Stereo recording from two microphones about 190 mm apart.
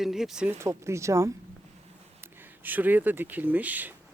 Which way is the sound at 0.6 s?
15° right (ahead or behind).